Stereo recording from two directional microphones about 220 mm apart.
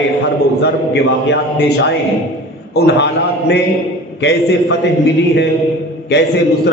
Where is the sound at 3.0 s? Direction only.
50° left (ahead or behind).